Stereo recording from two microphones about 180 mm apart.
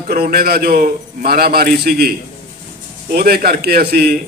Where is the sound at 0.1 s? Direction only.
55° right (ahead or behind).